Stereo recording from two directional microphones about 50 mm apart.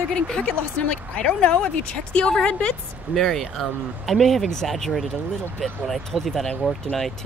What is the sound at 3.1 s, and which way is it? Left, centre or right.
Speech, centre.